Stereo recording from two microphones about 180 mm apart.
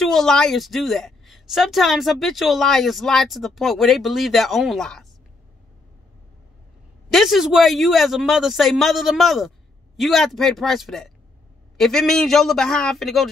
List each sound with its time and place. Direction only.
0.0 s a woman's voice: centre (ahead or behind)
7.1 s a woman's voice: centre (ahead or behind)